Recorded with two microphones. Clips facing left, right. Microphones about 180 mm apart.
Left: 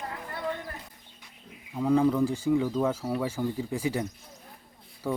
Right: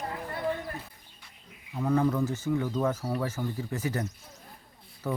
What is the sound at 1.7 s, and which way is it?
Speech, 10° left (ahead or behind).